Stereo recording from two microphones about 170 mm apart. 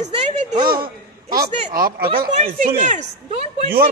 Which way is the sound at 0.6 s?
60° right (ahead or behind).